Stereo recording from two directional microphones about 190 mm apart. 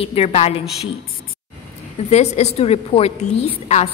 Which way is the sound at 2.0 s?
35° left (ahead or behind).